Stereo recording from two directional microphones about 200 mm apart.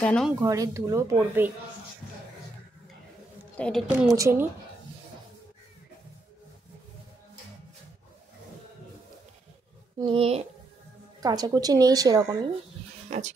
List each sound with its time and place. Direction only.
0.0 s a woman's voice: 5° left (ahead or behind)
0.4 s speech: 15° right (ahead or behind)
3.5 s a woman's voice: 5° left (ahead or behind)
4.1 s speech: 15° right (ahead or behind)
9.9 s a woman's voice: 25° right (ahead or behind)
11.2 s a woman's voice: 20° right (ahead or behind)